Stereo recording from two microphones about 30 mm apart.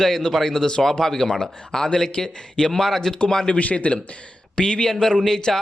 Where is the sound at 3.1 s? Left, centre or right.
Left.